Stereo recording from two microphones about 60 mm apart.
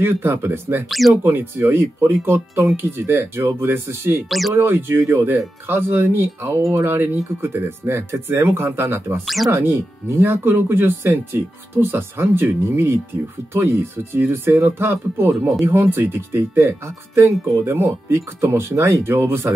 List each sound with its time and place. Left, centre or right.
0.0 s speech: right
0.8 s speech: centre
1.2 s speech: right
4.3 s speech: centre
4.6 s speech: right
9.2 s speech: centre
9.5 s speech: right